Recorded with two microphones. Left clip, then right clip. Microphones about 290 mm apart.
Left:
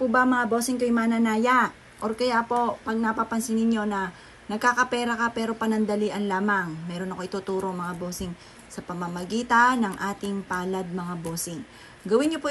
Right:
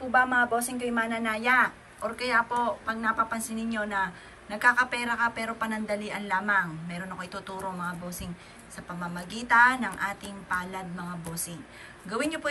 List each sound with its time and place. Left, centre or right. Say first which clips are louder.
0.1 s a woman's voice: right 4 dB; centre